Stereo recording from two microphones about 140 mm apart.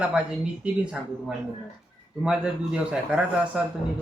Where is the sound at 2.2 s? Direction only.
5° right (ahead or behind).